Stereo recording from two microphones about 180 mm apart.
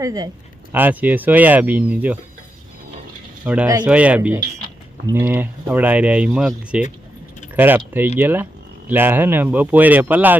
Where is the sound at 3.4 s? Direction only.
5° right (ahead or behind).